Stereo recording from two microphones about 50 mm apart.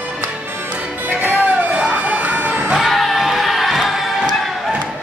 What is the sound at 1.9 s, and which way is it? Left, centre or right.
Music, right.